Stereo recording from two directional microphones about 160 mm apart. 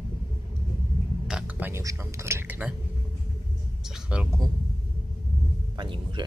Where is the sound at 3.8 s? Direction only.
5° right (ahead or behind).